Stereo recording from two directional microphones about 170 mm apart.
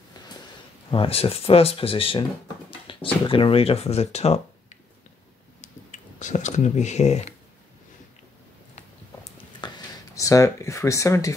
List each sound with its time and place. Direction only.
0.8 s speech: 35° left (ahead or behind)
2.9 s a sound: 30° left (ahead or behind)
3.3 s speech: 30° left (ahead or behind)
5.6 s a sound: 45° left (ahead or behind)
9.6 s whispering: 25° left (ahead or behind)
10.1 s speech: 20° left (ahead or behind)